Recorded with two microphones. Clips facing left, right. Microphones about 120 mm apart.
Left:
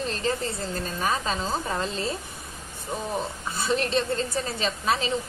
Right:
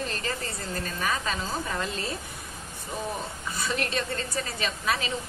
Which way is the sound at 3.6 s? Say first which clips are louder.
Left 5 dB; 30° left (ahead or behind).